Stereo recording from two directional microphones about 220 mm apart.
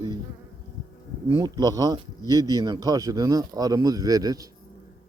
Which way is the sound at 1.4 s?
15° right (ahead or behind).